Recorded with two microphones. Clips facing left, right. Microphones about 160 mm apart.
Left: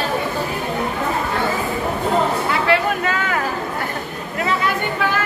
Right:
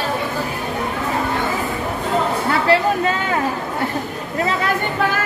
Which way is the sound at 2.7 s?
25° right (ahead or behind).